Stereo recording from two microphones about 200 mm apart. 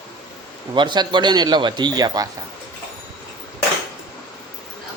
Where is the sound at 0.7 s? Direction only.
25° right (ahead or behind).